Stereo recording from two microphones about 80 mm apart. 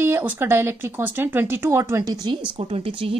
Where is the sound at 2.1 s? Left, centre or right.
Right.